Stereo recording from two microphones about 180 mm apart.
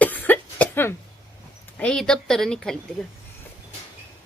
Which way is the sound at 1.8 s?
5° left (ahead or behind).